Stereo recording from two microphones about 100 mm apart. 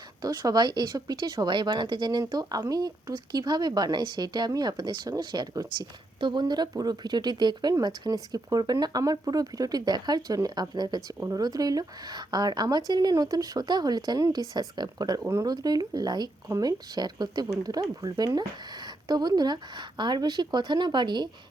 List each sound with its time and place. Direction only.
0.2 s speech: 40° right (ahead or behind)